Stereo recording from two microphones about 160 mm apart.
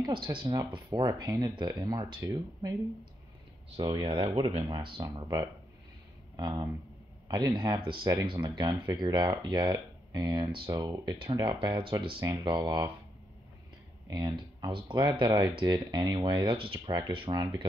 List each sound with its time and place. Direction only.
0.0 s speech: 30° right (ahead or behind)
3.7 s speech: 35° right (ahead or behind)
14.0 s speech: 25° right (ahead or behind)